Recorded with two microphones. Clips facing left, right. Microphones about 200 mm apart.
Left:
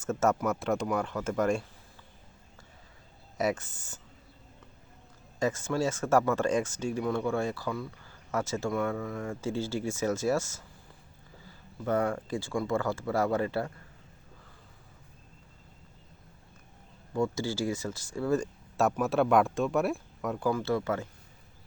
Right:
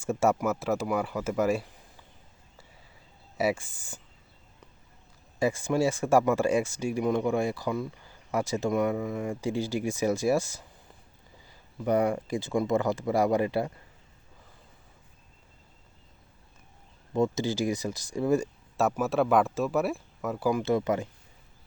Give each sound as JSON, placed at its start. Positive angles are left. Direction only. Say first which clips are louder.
{"t": 0.0, "sound": "speech", "louder": "right 2 dB", "side_deg": -10}
{"t": 3.3, "sound": "speech", "louder": "right 2 dB", "side_deg": -10}
{"t": 5.4, "sound": "speech", "louder": "right 3 dB", "side_deg": -10}
{"t": 17.2, "sound": "speech", "louder": "right 3 dB", "side_deg": -20}
{"t": 18.8, "sound": "speech", "louder": "right 1 dB", "side_deg": 0}
{"t": 20.5, "sound": "speech", "louder": "right 4 dB", "side_deg": -20}